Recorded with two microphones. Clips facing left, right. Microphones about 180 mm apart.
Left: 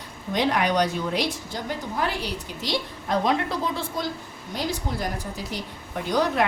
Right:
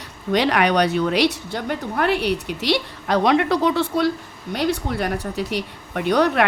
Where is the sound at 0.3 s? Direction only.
75° right (ahead or behind).